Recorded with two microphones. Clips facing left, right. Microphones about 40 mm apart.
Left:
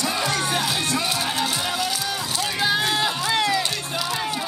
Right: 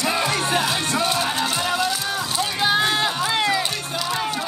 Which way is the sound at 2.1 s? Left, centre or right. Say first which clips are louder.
Right 2 dB; right.